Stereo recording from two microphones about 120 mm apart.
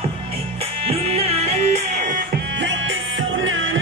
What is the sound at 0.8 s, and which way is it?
Music, 55° right (ahead or behind).